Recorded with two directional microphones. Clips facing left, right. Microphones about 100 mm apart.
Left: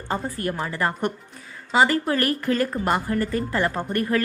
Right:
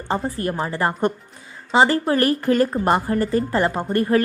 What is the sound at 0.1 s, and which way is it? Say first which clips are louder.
A woman's voice: right 3 dB; 30° right (ahead or behind).